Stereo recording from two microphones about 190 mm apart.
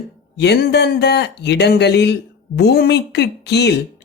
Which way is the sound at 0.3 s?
60° left (ahead or behind).